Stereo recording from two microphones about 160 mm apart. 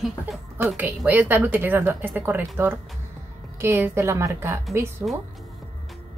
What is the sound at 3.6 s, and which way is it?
Speech, 15° right (ahead or behind).